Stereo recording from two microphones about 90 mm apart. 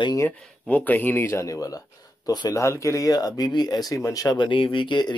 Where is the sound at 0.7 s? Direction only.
20° left (ahead or behind).